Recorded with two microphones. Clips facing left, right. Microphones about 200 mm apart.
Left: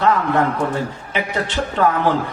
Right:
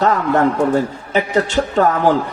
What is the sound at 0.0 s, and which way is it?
A man's voice, 45° right (ahead or behind).